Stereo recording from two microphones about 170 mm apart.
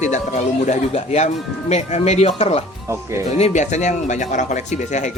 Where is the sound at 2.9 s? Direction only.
15° right (ahead or behind).